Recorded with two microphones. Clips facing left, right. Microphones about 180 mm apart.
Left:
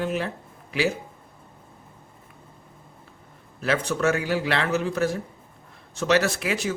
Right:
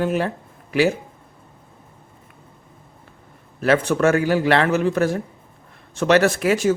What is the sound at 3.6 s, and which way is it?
A man's voice, 55° right (ahead or behind).